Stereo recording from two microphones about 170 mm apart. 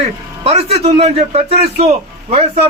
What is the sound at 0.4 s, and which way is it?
A man's voice, 35° right (ahead or behind).